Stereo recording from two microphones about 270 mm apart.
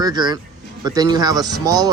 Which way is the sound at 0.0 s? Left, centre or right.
Centre.